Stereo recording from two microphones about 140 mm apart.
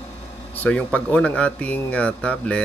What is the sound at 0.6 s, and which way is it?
Speech, 10° left (ahead or behind).